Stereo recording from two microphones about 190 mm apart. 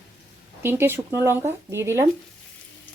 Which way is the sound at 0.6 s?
10° right (ahead or behind).